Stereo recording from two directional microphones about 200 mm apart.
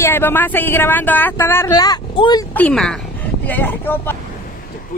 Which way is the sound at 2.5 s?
5° left (ahead or behind).